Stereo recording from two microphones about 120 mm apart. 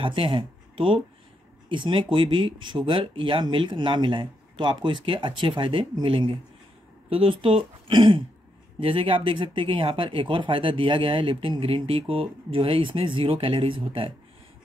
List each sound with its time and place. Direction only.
0.0 s speech: 45° right (ahead or behind)